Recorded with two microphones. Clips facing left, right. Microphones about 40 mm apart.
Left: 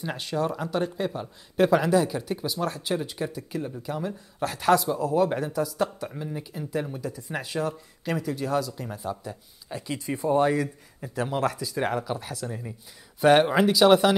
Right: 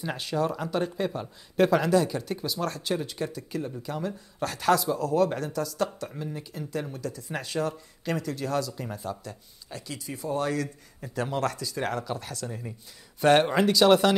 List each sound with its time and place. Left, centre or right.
0.0 s speech: centre
9.9 s speech: left
11.0 s speech: centre